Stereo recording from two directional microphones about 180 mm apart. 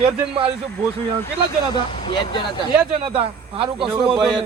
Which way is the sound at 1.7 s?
30° left (ahead or behind).